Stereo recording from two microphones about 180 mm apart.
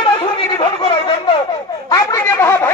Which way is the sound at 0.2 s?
25° left (ahead or behind).